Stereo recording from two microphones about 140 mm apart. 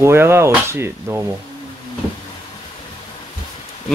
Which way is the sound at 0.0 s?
15° right (ahead or behind).